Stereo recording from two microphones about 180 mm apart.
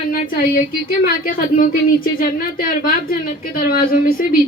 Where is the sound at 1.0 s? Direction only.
50° left (ahead or behind).